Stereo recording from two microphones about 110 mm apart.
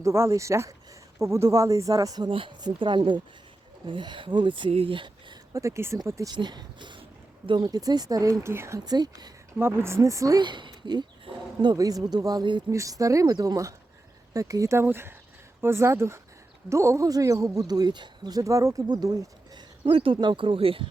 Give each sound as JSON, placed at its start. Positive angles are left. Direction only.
{"t": 0.0, "sound": "speech", "side_deg": -25}
{"t": 2.3, "sound": "speech", "side_deg": -45}
{"t": 5.5, "sound": "speech", "side_deg": -25}
{"t": 6.3, "sound": "speech", "side_deg": -40}
{"t": 8.8, "sound": "speech", "side_deg": -35}
{"t": 9.6, "sound": "speech", "side_deg": -20}
{"t": 10.4, "sound": "a woman's voice", "side_deg": -45}
{"t": 12.7, "sound": "speech", "side_deg": -30}
{"t": 19.8, "sound": "speech", "side_deg": -55}